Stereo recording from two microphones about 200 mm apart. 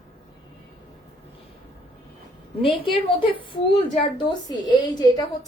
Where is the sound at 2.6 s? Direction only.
25° left (ahead or behind).